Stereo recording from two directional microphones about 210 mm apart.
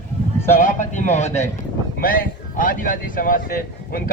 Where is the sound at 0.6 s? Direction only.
35° left (ahead or behind).